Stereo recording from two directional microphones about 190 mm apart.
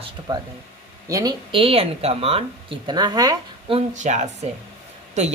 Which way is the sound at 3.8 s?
40° right (ahead or behind).